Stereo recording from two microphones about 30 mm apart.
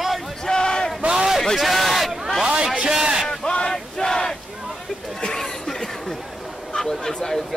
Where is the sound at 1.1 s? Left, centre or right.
Centre.